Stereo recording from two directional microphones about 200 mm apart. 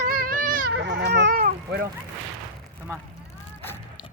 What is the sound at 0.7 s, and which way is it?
Baby cry, 65° right (ahead or behind).